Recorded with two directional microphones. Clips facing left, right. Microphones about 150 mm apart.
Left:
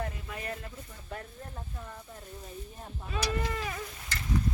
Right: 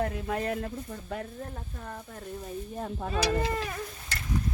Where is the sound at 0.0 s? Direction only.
65° right (ahead or behind); by 0.7 s 80° right.